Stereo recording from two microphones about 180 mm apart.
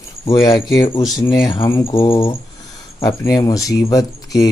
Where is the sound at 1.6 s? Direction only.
15° left (ahead or behind).